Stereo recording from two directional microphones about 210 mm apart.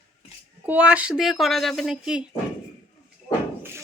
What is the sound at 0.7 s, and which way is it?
Speech, 5° right (ahead or behind).